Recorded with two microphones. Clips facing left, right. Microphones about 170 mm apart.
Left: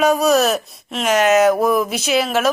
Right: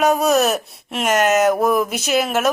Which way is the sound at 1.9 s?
45° right (ahead or behind).